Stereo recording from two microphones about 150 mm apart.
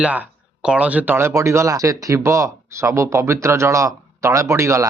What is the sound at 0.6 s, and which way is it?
Speech, 10° right (ahead or behind).